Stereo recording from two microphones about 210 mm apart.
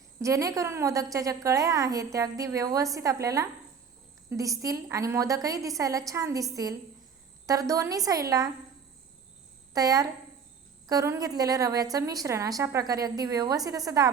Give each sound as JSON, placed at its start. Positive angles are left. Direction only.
{"t": 0.2, "sound": "a woman's voice", "side_deg": -15}
{"t": 7.4, "sound": "a woman's voice", "side_deg": -15}
{"t": 9.7, "sound": "a woman's voice", "side_deg": -15}